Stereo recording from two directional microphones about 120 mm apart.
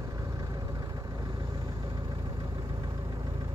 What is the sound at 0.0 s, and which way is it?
Vehicle, 25° right (ahead or behind).